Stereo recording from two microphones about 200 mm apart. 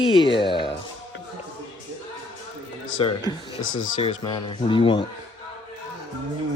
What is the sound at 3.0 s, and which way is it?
Speech, 25° left (ahead or behind).